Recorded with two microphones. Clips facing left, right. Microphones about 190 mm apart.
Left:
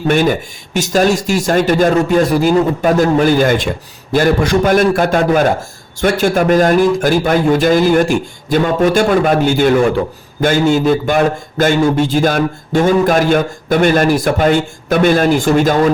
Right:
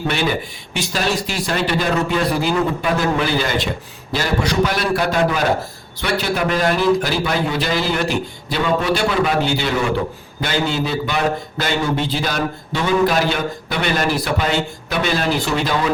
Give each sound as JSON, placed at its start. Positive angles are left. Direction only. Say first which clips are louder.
{"t": 0.1, "sound": "a man's voice", "louder": "left 10 dB", "side_deg": 45}